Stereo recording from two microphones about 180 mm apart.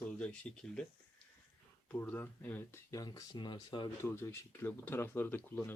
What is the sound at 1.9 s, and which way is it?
Speech, 10° left (ahead or behind).